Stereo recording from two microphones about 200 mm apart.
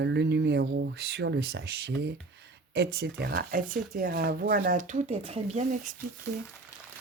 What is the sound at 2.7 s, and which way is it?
Speech, 55° right (ahead or behind).